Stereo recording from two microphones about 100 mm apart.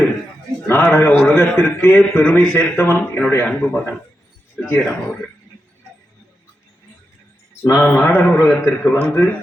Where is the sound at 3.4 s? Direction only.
10° left (ahead or behind).